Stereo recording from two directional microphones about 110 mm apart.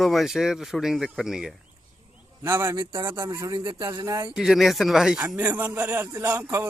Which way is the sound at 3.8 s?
30° right (ahead or behind).